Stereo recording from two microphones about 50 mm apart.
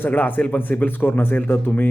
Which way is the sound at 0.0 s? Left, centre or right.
Left.